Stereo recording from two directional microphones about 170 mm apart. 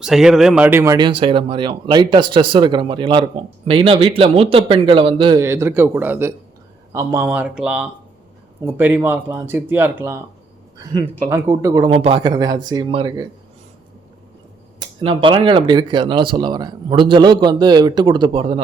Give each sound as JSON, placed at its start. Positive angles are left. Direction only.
{"t": 0.0, "sound": "speech", "side_deg": 0}
{"t": 1.0, "sound": "speech", "side_deg": -30}
{"t": 5.4, "sound": "speech", "side_deg": -15}
{"t": 10.9, "sound": "speech", "side_deg": -30}
{"t": 11.3, "sound": "speech", "side_deg": -15}
{"t": 11.9, "sound": "speech", "side_deg": -35}
{"t": 12.3, "sound": "speech", "side_deg": -20}
{"t": 14.8, "sound": "speech", "side_deg": -30}